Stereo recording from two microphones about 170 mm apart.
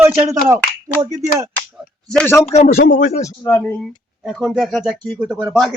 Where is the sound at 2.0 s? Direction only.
10° left (ahead or behind).